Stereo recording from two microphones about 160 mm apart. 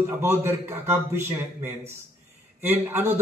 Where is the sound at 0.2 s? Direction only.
15° right (ahead or behind).